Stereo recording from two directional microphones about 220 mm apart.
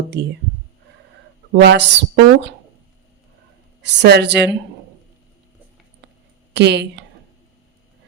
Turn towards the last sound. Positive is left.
turn(degrees=-50)  # may be behind; listen again after turning